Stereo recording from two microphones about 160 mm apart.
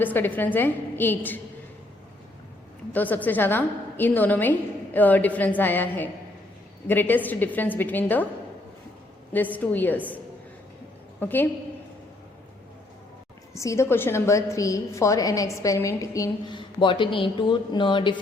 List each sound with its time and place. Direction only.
0.0 s a woman's voice: 10° left (ahead or behind)
2.9 s a woman's voice: 10° left (ahead or behind)
9.3 s a woman's voice: 10° left (ahead or behind)
11.2 s a woman's voice: 10° left (ahead or behind)
13.6 s a woman's voice: 20° left (ahead or behind)